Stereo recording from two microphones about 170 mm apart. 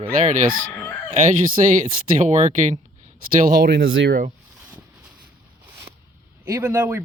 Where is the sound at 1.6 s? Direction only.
45° right (ahead or behind).